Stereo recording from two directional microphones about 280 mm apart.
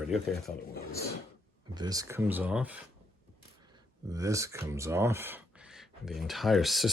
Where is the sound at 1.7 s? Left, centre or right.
Centre.